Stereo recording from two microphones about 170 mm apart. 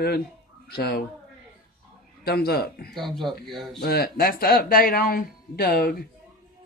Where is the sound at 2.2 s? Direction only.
65° left (ahead or behind).